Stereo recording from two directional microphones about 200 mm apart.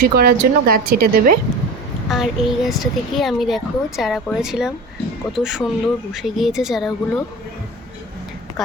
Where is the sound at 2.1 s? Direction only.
Centre (ahead or behind).